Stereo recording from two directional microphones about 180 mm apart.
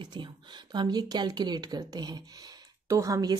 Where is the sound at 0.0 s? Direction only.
25° right (ahead or behind).